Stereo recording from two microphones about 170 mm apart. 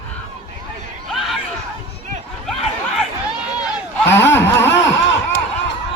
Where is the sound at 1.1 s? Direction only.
Centre (ahead or behind).